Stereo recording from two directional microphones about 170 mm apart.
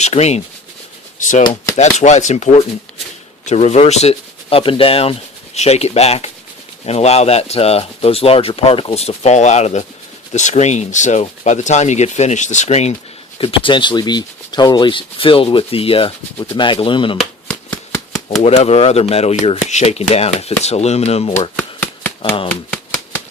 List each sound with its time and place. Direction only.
0.0 s speech: 40° left (ahead or behind)
1.7 s speech: 40° left (ahead or behind)
17.2 s shuffling cards: 5° left (ahead or behind)
18.4 s speech: 35° left (ahead or behind)
21.5 s shuffling cards: 10° left (ahead or behind)
22.4 s typewriter: 10° left (ahead or behind)